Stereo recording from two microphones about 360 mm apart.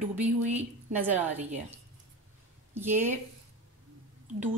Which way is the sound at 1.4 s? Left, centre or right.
Centre.